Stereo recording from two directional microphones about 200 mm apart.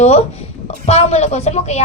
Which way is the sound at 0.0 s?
30° left (ahead or behind).